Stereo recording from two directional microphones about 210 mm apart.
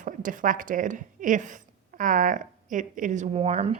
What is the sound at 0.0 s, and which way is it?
A woman's voice, 40° right (ahead or behind).